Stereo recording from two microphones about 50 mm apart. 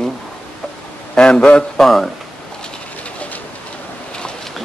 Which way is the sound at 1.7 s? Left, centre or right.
Centre.